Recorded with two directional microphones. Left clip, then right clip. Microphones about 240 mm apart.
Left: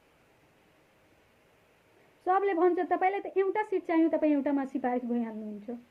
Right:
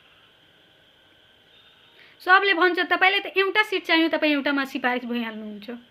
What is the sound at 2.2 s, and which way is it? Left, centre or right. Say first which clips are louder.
A woman's voice: right 8 dB; centre.